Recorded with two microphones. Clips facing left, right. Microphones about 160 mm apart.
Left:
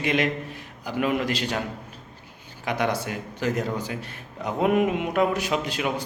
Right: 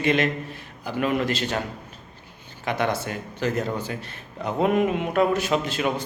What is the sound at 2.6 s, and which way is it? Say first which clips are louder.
A man's voice: right 1 dB; 10° left (ahead or behind).